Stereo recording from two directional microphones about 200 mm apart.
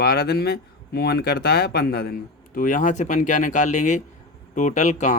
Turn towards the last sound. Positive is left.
turn(degrees=35)  # may be behind; listen again after turning